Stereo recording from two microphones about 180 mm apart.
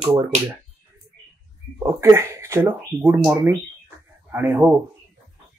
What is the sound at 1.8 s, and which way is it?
Speech, 15° right (ahead or behind).